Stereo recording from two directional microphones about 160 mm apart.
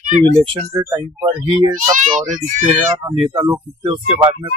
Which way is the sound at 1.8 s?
50° right (ahead or behind).